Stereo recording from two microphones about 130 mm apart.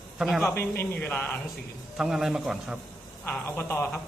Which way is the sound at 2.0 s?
5° right (ahead or behind).